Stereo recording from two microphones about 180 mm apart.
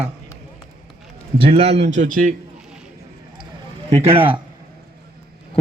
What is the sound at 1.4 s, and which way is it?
Speech, 30° right (ahead or behind).